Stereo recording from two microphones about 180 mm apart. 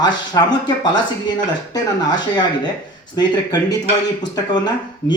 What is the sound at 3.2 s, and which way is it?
A man's voice, 25° left (ahead or behind).